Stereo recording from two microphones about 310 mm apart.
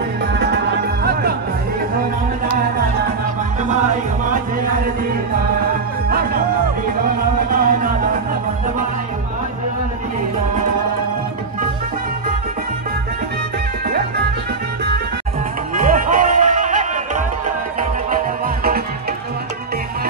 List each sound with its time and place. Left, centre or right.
6.0 s music: right
7.5 s music: right
15.7 s music: right